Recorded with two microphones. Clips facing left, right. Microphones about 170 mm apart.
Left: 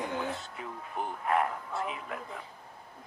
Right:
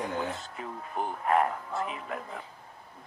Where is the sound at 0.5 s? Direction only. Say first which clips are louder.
Right 3 dB; 40° right (ahead or behind).